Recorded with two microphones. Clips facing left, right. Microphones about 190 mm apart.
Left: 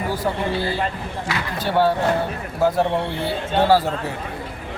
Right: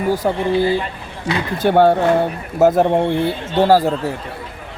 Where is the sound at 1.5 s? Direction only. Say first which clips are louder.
Right 6 dB; 55° right (ahead or behind).